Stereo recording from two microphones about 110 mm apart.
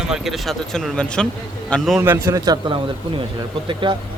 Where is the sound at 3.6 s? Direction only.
45° right (ahead or behind).